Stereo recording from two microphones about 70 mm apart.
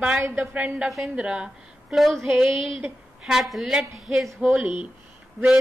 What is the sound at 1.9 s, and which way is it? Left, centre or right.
A woman's voice, centre.